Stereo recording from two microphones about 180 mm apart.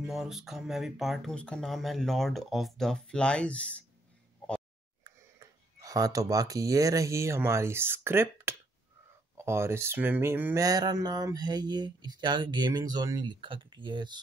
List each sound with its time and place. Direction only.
0.0 s speech: centre (ahead or behind)
5.8 s speech: 20° right (ahead or behind)